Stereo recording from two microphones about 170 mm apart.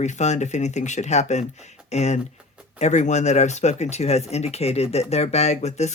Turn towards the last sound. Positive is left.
turn(degrees=40)  # may be behind; listen again after turning